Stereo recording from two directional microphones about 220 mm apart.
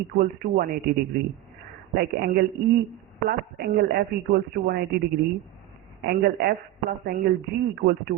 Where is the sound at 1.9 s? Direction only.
45° right (ahead or behind).